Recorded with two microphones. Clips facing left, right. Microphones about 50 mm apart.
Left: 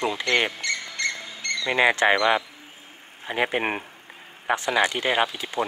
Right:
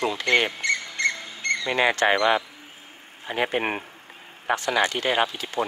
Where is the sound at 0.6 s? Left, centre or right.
Right.